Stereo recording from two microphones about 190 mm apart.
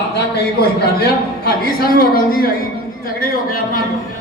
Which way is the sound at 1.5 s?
50° left (ahead or behind).